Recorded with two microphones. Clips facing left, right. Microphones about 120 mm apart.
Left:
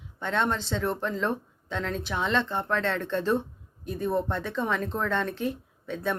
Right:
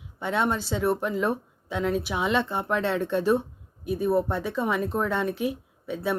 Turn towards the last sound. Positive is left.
turn(degrees=-10)  # may be behind; listen again after turning